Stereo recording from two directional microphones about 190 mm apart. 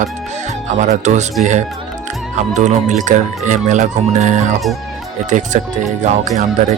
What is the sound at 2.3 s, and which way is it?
Speech, 40° right (ahead or behind).